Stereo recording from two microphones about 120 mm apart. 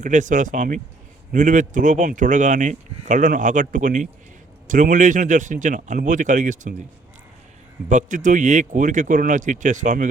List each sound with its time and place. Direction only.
0.0 s speech: 90° right
7.9 s speech: 90° right